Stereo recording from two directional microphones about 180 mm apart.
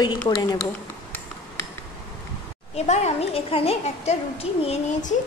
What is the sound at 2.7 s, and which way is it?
A woman's voice, 35° left (ahead or behind).